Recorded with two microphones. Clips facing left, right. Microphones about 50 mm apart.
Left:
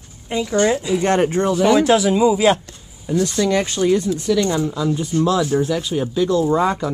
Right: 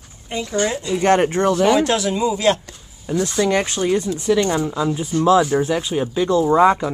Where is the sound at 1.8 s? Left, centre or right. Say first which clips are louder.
Left 5 dB; centre.